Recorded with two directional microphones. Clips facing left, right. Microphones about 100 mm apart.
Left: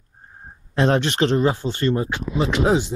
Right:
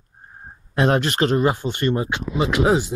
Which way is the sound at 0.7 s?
5° right (ahead or behind).